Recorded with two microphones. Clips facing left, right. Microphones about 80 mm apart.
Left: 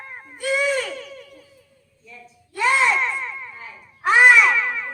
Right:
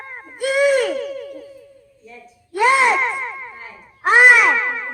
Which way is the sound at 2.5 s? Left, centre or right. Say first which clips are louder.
Right 4 dB; right.